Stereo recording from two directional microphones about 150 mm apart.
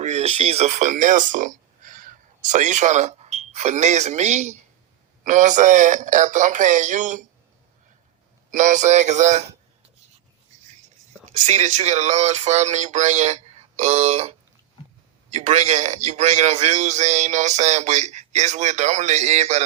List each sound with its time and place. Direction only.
0.0 s speech: 45° right (ahead or behind)
8.4 s a man's voice: 55° right (ahead or behind)
11.4 s a man's voice: 50° right (ahead or behind)